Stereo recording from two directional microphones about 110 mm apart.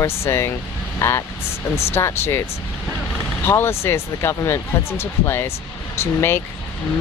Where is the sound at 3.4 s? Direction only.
25° left (ahead or behind).